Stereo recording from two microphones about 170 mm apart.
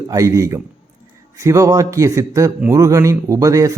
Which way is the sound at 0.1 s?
20° right (ahead or behind).